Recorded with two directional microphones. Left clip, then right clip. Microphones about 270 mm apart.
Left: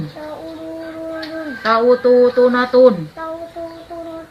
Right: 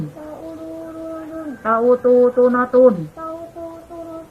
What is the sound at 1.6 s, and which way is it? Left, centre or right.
Speech, centre.